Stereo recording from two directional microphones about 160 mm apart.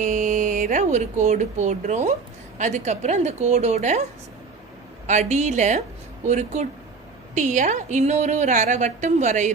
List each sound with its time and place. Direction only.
0.0 s a sound: 50° right (ahead or behind)
1.2 s a woman's voice: 45° right (ahead or behind)
5.0 s a woman's voice: 45° right (ahead or behind)